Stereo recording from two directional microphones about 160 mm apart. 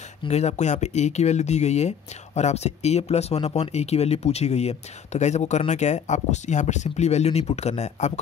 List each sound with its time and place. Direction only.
0.2 s speech: 40° left (ahead or behind)